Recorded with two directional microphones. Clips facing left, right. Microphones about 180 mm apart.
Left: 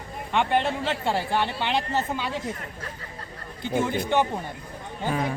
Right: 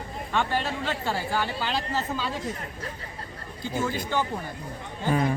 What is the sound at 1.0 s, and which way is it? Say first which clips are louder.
Speech: left 4 dB; 25° left (ahead or behind).